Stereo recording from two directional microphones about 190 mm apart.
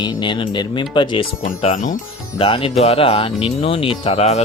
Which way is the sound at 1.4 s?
40° left (ahead or behind).